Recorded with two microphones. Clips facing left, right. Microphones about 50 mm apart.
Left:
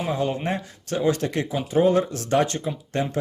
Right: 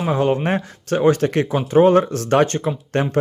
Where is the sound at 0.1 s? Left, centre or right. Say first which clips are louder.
Right 8 dB; right.